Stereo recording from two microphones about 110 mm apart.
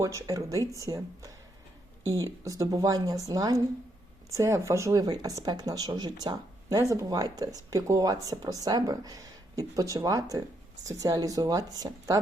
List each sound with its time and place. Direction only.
0.0 s speech: 30° right (ahead or behind)